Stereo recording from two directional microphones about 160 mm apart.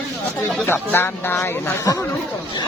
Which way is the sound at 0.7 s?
15° left (ahead or behind).